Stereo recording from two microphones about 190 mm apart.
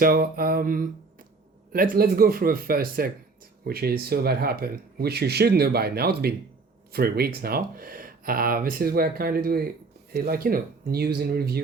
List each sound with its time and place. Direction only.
0.0 s speech: 50° right (ahead or behind)